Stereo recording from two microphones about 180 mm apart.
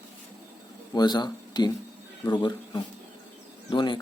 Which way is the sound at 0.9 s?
25° left (ahead or behind).